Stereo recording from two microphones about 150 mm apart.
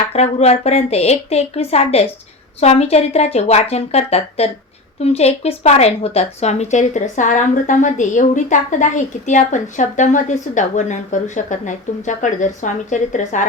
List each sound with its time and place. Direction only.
0.1 s a woman's voice: 45° left (ahead or behind)